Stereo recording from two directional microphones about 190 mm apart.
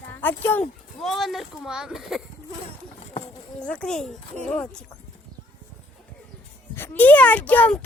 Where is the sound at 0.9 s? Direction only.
Centre (ahead or behind).